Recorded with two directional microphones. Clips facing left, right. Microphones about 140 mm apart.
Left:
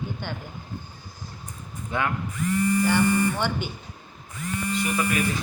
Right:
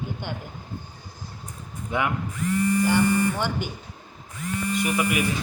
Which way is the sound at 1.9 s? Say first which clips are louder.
Right 1 dB; 15° right (ahead or behind).